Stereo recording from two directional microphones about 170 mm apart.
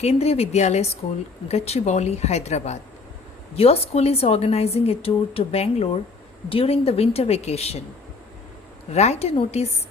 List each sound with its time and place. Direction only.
0.0 s a woman's voice: 40° left (ahead or behind)
8.9 s a woman's voice: 40° left (ahead or behind)